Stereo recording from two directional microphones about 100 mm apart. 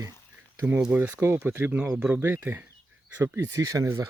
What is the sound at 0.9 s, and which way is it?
Speech, 15° right (ahead or behind).